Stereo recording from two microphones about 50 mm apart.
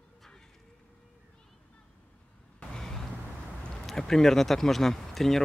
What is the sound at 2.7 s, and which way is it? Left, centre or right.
Vehicle, centre.